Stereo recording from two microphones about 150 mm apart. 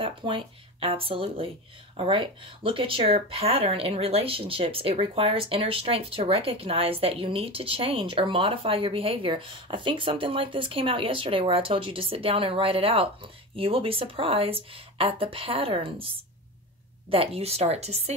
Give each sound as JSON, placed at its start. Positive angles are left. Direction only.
{"t": 0.0, "sound": "speech", "side_deg": -35}